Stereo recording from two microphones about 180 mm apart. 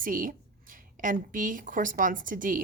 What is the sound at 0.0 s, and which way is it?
A woman's voice, 50° right (ahead or behind).